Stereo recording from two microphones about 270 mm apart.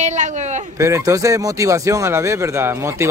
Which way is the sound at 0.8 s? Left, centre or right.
Centre.